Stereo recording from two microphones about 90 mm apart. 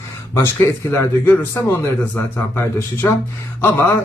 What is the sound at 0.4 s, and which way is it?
Speech, 25° left (ahead or behind).